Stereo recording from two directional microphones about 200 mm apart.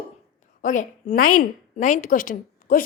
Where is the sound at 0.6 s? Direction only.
35° left (ahead or behind).